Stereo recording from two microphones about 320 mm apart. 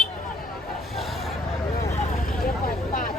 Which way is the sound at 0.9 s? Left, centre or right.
Centre.